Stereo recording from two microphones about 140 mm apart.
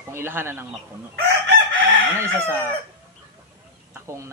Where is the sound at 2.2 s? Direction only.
15° right (ahead or behind).